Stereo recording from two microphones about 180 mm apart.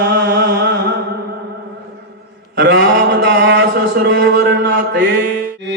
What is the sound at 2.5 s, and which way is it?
Mantra, 70° right (ahead or behind).